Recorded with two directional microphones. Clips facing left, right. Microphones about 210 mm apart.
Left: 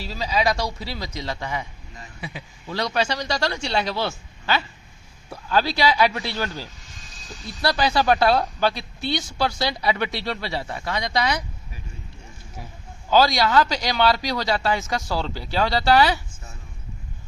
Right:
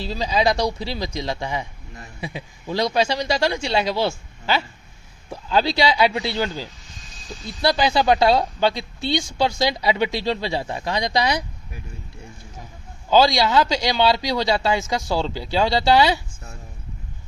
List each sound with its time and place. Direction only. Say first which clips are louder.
0.2 s speech: right 3 dB; 30° right (ahead or behind); by 4.1 s 10° right (ahead or behind)
5.3 s speech: right 2 dB; 20° right (ahead or behind)
13.1 s speech: right 2 dB; 25° right (ahead or behind)